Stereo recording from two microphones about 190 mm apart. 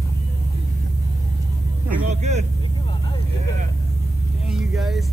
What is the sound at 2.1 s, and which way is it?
Vehicle, 35° right (ahead or behind).